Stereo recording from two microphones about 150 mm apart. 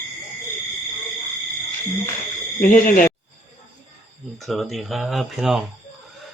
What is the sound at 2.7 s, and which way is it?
Speech, 65° left (ahead or behind).